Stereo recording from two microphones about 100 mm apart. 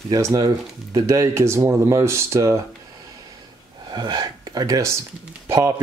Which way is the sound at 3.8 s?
45° right (ahead or behind).